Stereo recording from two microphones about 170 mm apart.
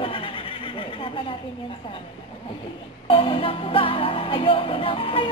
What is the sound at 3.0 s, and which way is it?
Music, 30° left (ahead or behind).